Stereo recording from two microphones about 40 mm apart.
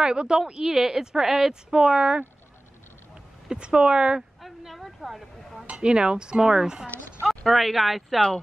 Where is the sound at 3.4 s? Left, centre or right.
Right.